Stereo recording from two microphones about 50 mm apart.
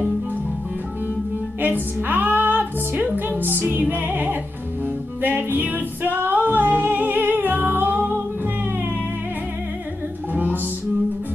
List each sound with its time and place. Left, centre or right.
1.6 s music: right
10.3 s music: right